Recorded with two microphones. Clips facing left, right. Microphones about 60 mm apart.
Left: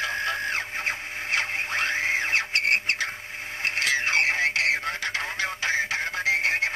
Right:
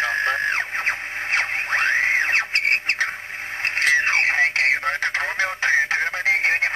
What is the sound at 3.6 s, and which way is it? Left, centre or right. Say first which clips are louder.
Radio: right 6 dB; right.